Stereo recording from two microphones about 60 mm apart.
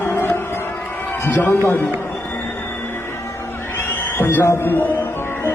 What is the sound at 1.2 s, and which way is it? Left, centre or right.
Speech, left.